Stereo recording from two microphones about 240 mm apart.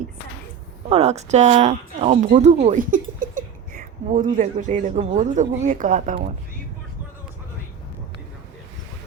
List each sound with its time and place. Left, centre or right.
0.9 s speech: right